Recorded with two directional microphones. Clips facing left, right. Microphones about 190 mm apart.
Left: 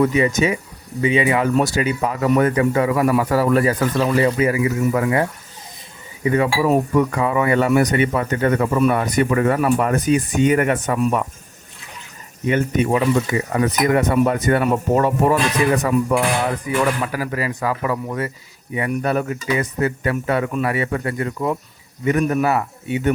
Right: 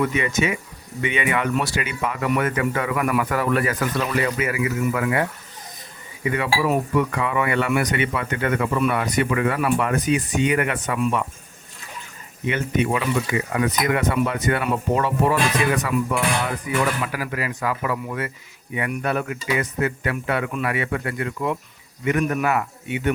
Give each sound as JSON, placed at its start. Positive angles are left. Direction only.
{"t": 0.0, "sound": "speech", "side_deg": 35}
{"t": 6.2, "sound": "speech", "side_deg": 35}
{"t": 12.5, "sound": "speech", "side_deg": 40}